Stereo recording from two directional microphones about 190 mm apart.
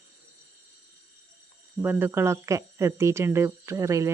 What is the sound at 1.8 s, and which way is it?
Speech, 10° right (ahead or behind).